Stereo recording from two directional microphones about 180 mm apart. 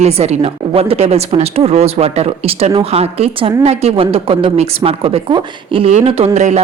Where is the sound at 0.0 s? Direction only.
35° right (ahead or behind).